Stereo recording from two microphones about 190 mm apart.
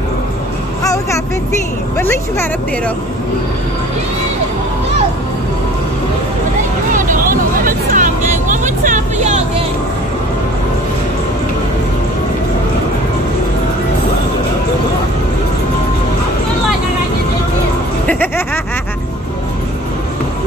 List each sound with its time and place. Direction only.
2.0 s speech: 10° left (ahead or behind)
7.0 s music: 45° right (ahead or behind)
8.6 s vehicle: 40° right (ahead or behind)